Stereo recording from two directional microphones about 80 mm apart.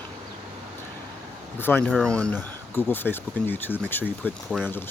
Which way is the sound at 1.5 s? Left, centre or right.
Left.